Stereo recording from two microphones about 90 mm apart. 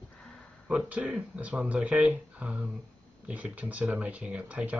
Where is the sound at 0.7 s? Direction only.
10° right (ahead or behind).